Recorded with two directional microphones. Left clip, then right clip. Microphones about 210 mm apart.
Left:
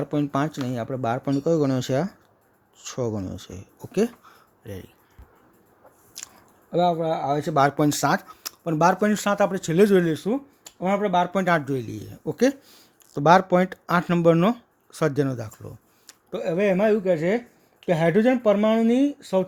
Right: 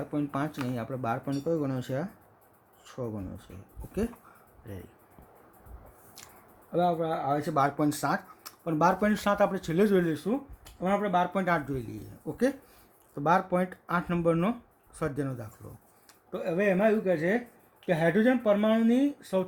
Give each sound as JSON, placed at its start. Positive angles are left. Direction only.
{"t": 0.0, "sound": "speech", "side_deg": 40}
{"t": 6.2, "sound": "chewing", "side_deg": 35}
{"t": 6.7, "sound": "speech", "side_deg": 35}